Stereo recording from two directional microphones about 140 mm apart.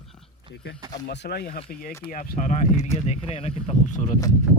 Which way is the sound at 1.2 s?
90° left.